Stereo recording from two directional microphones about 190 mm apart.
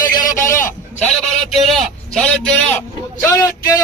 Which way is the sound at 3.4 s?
20° left (ahead or behind).